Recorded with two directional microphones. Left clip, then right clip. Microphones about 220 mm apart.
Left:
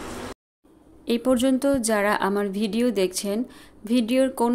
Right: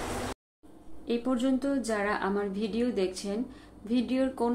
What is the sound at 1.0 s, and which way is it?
A woman's voice, 55° left (ahead or behind).